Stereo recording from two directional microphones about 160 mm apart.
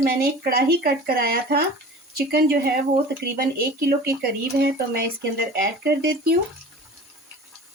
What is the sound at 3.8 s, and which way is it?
Speech, 75° right (ahead or behind).